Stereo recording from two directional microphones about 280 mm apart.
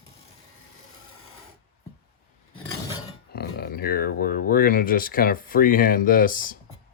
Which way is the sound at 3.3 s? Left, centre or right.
Left.